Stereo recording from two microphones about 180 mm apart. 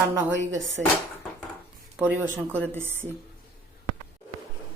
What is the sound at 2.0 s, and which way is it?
Speech, 10° right (ahead or behind).